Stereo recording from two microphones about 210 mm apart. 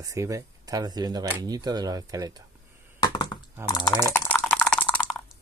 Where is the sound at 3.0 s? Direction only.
20° left (ahead or behind).